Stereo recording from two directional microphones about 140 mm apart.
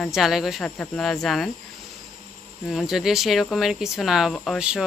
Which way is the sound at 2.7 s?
Centre (ahead or behind).